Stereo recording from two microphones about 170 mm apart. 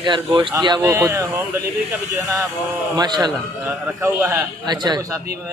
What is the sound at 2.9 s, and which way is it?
Speech, 25° right (ahead or behind).